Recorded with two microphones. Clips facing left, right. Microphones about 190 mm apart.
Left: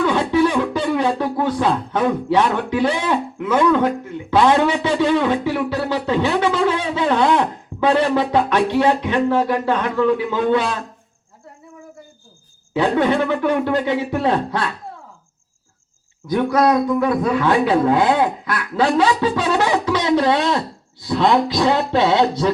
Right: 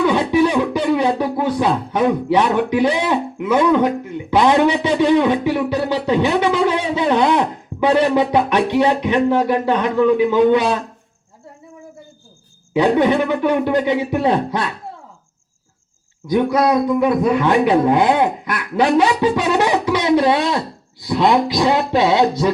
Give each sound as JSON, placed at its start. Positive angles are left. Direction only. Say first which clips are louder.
{"t": 0.0, "sound": "speech", "louder": "right 2 dB", "side_deg": -15}
{"t": 12.7, "sound": "speech", "louder": "right 3 dB", "side_deg": -15}
{"t": 16.2, "sound": "speech", "louder": "right 1 dB", "side_deg": -15}